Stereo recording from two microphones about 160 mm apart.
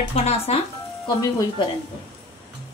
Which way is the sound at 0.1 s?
40° left (ahead or behind).